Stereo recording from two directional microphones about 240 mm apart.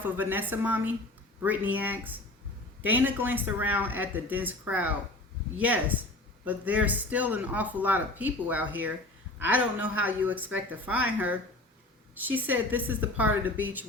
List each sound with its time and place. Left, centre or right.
0.0 s speech: centre